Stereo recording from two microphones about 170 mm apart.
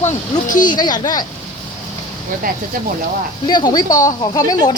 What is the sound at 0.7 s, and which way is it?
Speech, 25° left (ahead or behind).